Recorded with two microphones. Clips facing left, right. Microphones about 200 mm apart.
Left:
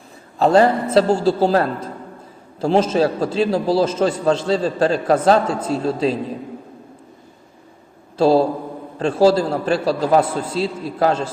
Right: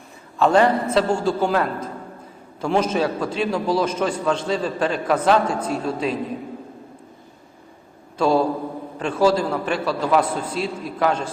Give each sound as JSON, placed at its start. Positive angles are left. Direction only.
{"t": 0.3, "sound": "a man's voice", "side_deg": 35}
{"t": 8.2, "sound": "a man's voice", "side_deg": 30}